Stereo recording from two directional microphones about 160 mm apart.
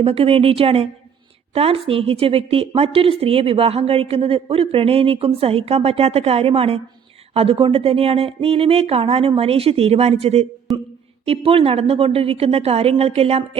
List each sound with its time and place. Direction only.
0.0 s a woman's voice: 35° right (ahead or behind)
10.7 s a sound: centre (ahead or behind)
11.3 s a woman's voice: 35° right (ahead or behind)